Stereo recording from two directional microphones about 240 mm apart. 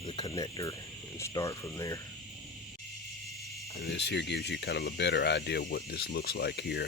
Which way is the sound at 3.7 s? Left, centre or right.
Left.